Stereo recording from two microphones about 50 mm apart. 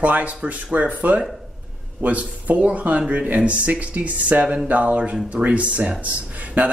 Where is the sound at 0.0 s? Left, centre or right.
Right.